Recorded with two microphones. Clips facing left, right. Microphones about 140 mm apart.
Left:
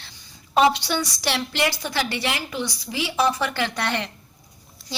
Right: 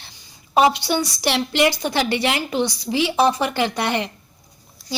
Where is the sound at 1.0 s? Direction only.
20° right (ahead or behind).